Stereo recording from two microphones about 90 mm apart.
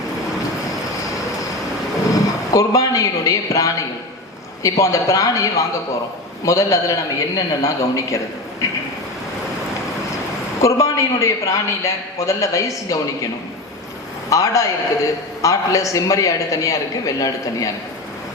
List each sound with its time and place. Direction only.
2.0 s a man's voice: 40° left (ahead or behind)
10.6 s a man's voice: 35° left (ahead or behind)
14.3 s a man's voice: 40° left (ahead or behind)